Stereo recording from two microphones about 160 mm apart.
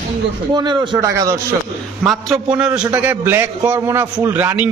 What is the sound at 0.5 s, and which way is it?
Speech, 30° right (ahead or behind).